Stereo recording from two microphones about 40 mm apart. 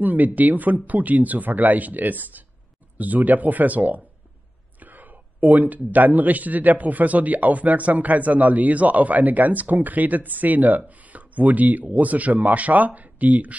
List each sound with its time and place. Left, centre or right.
0.0 s a man's voice: right